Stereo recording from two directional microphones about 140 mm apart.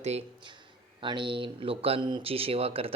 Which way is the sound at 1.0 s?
35° right (ahead or behind).